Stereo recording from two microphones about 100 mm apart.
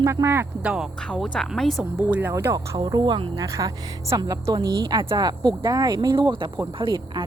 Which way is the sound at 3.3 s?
35° right (ahead or behind).